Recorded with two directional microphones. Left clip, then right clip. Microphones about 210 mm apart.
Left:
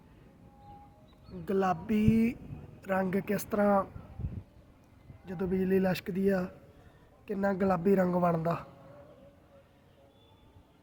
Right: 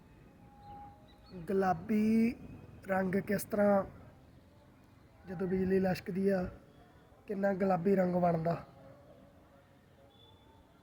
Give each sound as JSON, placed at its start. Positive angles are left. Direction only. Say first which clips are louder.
{"t": 1.3, "sound": "a woman's voice", "louder": "left 2 dB", "side_deg": 10}
{"t": 5.2, "sound": "a woman's voice", "louder": "left 2 dB", "side_deg": 15}